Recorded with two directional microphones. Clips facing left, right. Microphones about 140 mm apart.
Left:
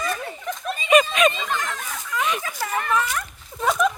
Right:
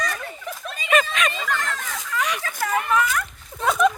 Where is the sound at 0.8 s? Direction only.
20° left (ahead or behind).